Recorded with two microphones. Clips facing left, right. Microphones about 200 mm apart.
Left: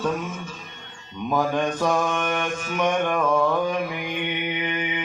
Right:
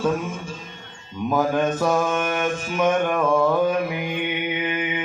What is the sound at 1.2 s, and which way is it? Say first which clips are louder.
Mantra: right 2 dB; 5° right (ahead or behind).